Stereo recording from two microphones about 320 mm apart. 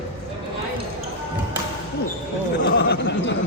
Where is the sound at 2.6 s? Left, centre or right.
Left.